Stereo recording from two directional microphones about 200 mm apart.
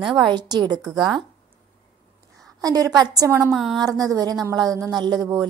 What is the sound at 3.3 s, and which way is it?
Speech, 5° right (ahead or behind).